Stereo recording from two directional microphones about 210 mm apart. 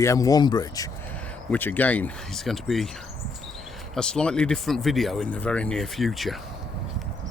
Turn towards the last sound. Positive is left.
turn(degrees=0)  # may be behind; listen again after turning